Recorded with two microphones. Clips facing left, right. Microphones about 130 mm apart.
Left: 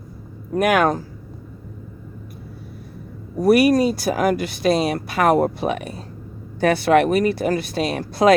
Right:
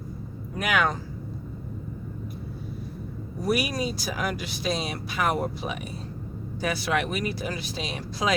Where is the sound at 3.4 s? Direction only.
55° left (ahead or behind).